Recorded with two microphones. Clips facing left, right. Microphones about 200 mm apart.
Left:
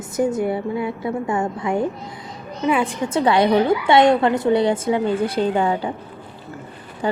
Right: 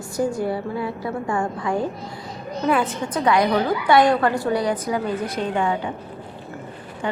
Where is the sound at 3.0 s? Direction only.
30° left (ahead or behind).